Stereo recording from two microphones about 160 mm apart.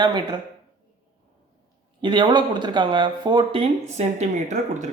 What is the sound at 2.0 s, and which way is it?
A man's voice, 30° right (ahead or behind).